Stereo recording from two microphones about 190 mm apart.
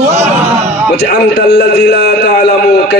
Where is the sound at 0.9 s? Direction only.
60° left (ahead or behind).